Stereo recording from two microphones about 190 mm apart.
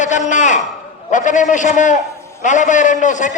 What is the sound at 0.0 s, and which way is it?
A man's voice, 40° left (ahead or behind).